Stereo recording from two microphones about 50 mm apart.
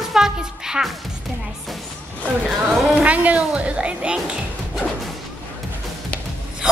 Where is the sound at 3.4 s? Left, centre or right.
Right.